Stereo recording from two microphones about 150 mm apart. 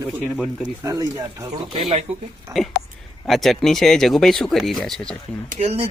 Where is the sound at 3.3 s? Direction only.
Centre (ahead or behind).